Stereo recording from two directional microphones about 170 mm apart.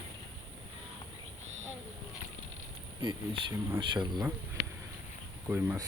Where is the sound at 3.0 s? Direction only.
30° right (ahead or behind).